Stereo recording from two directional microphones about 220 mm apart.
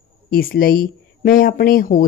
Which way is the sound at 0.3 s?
40° left (ahead or behind).